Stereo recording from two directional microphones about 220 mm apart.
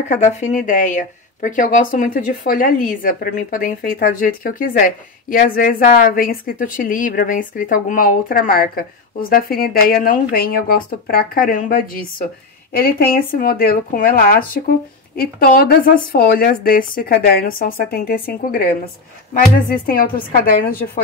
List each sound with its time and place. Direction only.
0.1 s speech: 35° left (ahead or behind)
19.9 s speech: 40° left (ahead or behind)